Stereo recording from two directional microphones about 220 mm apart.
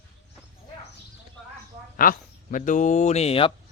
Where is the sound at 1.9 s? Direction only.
40° left (ahead or behind).